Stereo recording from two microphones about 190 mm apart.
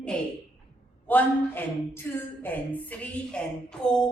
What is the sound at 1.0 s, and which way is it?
A woman's voice, 10° left (ahead or behind).